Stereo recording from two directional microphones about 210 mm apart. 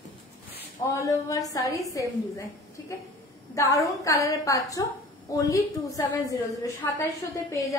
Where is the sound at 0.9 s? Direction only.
15° left (ahead or behind).